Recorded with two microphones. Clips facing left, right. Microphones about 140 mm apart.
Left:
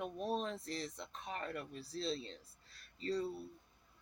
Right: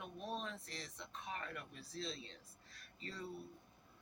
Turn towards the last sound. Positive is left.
turn(degrees=35)  # may be behind; listen again after turning